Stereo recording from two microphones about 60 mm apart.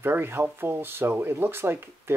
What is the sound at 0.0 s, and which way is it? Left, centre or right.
Speech, right.